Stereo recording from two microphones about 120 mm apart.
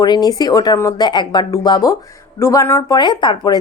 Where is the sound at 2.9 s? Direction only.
40° left (ahead or behind).